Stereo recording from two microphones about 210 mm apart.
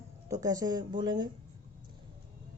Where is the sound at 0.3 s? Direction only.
15° right (ahead or behind).